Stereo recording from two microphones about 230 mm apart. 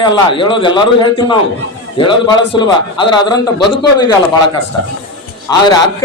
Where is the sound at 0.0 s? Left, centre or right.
Left.